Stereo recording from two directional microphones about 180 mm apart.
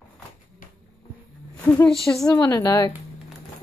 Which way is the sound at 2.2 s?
20° left (ahead or behind).